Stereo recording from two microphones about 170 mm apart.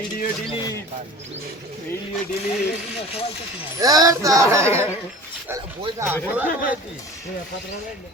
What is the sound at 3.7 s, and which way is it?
Speech, 20° right (ahead or behind).